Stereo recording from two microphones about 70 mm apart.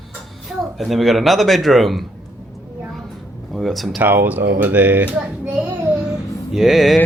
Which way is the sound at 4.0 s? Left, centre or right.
Right.